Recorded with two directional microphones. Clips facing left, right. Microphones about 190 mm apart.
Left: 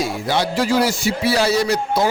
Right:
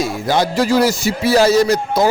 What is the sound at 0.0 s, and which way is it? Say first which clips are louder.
A man's voice: right 3 dB; 45° right (ahead or behind).